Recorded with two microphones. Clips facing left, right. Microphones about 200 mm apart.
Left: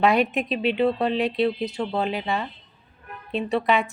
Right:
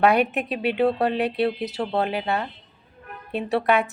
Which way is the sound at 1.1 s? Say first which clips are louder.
Even; 60° right (ahead or behind).